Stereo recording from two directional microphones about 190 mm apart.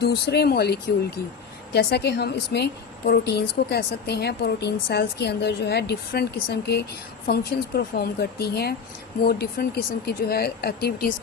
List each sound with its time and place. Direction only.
0.0 s a woman's voice: 60° left (ahead or behind)